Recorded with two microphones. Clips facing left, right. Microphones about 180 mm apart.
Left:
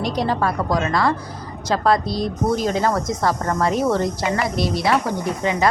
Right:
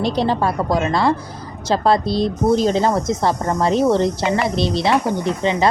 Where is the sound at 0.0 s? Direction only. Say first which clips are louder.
Right 3 dB; 30° right (ahead or behind).